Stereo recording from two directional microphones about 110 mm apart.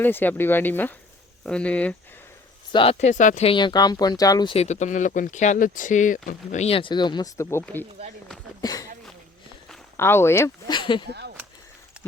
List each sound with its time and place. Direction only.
0.0 s speech: 20° left (ahead or behind)
2.7 s speech: 60° left (ahead or behind); by 3.5 s 90° left
3.5 s speech: 40° left (ahead or behind)
4.5 s speech: 80° left
6.7 s speech: 45° left (ahead or behind); by 7.6 s 30° left (ahead or behind)
8.6 s speech: 35° left (ahead or behind)
10.0 s speech: 20° left (ahead or behind)
10.7 s speech: 45° left (ahead or behind)